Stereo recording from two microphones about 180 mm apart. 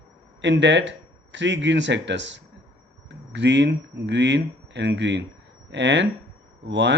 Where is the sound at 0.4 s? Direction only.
85° right.